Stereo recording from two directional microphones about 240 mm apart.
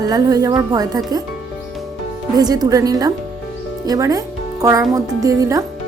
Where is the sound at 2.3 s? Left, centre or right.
Centre.